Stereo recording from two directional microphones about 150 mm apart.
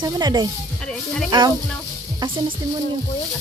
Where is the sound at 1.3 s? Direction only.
30° right (ahead or behind).